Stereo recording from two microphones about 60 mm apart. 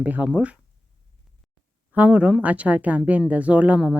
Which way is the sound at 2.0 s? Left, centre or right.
Right.